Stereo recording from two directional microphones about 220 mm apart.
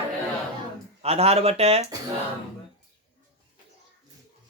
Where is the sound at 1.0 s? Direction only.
30° right (ahead or behind).